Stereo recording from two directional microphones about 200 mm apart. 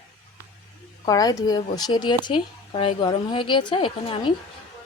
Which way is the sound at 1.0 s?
20° left (ahead or behind).